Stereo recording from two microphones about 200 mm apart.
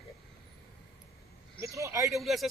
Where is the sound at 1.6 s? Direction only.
15° right (ahead or behind).